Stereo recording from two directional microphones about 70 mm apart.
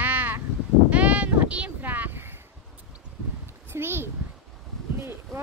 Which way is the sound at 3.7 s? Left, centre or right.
Right.